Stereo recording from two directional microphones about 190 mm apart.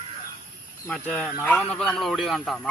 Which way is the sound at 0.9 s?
5° left (ahead or behind).